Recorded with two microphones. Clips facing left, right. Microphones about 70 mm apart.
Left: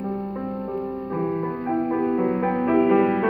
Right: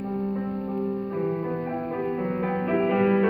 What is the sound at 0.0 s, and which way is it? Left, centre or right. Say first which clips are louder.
Music: even; centre.